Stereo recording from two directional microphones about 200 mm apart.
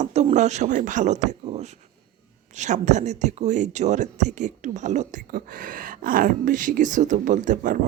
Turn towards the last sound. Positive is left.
turn(degrees=-40)  # may be behind; listen again after turning